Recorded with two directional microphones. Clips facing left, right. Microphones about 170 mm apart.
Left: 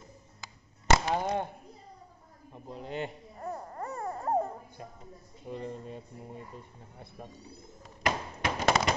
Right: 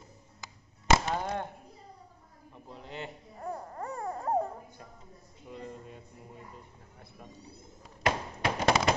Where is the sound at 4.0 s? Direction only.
Centre (ahead or behind).